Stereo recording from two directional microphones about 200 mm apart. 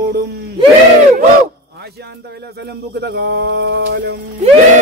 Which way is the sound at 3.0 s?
55° right (ahead or behind).